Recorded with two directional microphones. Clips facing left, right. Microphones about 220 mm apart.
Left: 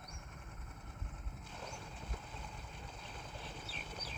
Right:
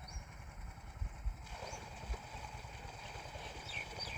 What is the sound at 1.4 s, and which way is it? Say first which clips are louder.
Vehicle: even; 10° right (ahead or behind).